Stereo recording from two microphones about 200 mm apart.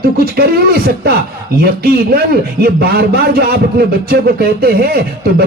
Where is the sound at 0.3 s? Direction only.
50° right (ahead or behind).